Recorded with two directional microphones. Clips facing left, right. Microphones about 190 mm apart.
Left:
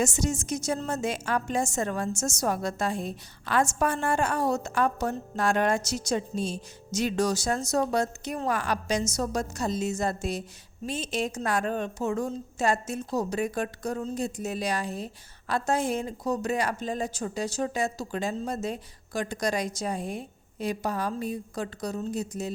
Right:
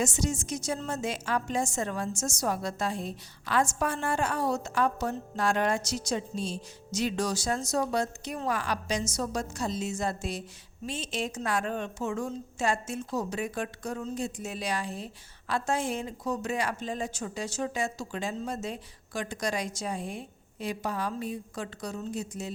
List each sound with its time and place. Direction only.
0.0 s a woman's voice: 45° left (ahead or behind)